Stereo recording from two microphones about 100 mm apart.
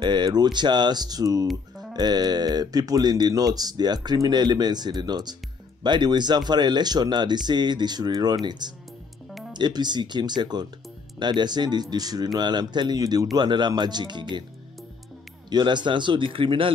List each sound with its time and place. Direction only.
0.0 s speech: 45° right (ahead or behind)
1.5 s music: centre (ahead or behind)
2.0 s speech: 45° right (ahead or behind)
15.5 s speech: 50° right (ahead or behind)